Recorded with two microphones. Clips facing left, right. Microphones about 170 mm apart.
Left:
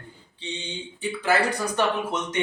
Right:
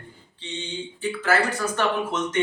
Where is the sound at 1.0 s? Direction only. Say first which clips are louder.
Even; 15° left (ahead or behind).